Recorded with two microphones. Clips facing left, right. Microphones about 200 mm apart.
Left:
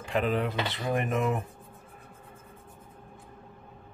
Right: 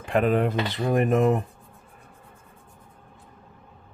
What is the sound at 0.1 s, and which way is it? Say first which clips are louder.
Speech: right 6 dB; 55° right (ahead or behind).